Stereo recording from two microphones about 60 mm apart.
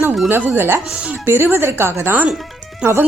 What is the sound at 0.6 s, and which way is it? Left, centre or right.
A woman's voice, right.